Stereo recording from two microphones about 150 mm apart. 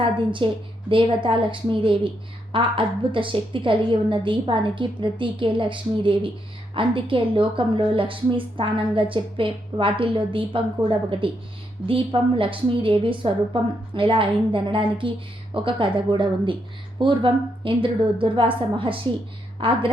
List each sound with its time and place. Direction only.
0.0 s a woman's voice: 35° right (ahead or behind)